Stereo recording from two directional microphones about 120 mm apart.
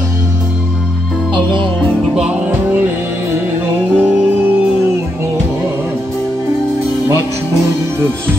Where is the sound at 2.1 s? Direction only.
10° right (ahead or behind).